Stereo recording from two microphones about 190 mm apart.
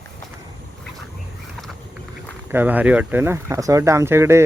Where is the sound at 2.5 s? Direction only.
10° right (ahead or behind).